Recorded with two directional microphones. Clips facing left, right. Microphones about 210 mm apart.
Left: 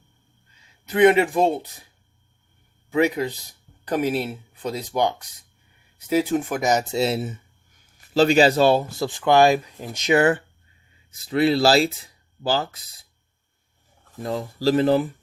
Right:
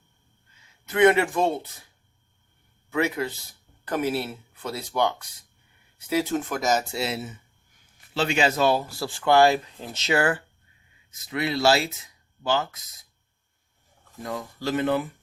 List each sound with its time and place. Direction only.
0.9 s speech: 15° left (ahead or behind)
2.9 s speech: 15° left (ahead or behind)
11.1 s speech: 30° left (ahead or behind)
14.2 s speech: 30° left (ahead or behind)